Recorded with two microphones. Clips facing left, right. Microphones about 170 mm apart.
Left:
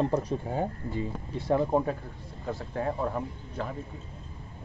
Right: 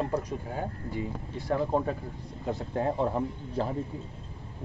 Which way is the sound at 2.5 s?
25° right (ahead or behind).